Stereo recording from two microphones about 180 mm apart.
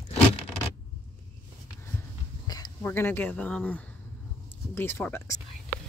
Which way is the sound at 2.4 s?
20° left (ahead or behind).